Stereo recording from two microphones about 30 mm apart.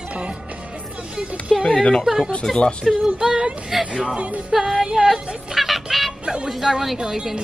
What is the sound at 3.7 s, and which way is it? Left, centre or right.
Music, centre.